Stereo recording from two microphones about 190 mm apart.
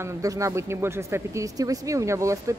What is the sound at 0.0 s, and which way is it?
A woman's voice, 15° right (ahead or behind).